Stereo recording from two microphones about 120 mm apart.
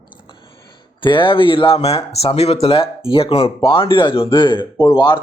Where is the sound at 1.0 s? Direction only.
45° left (ahead or behind).